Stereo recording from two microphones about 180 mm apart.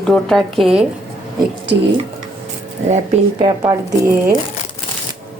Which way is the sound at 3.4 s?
20° right (ahead or behind).